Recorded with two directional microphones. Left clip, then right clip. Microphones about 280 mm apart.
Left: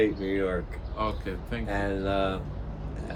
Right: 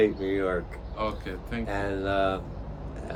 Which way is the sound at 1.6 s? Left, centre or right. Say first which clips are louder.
Even; centre.